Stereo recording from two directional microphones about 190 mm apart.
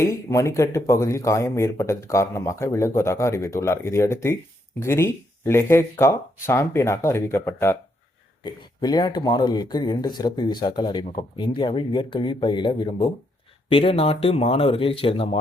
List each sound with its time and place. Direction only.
0.0 s speech: 15° left (ahead or behind)